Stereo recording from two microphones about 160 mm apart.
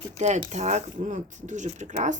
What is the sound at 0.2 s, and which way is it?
Rub, 45° right (ahead or behind).